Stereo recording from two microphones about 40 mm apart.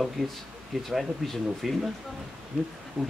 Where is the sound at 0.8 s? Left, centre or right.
Centre.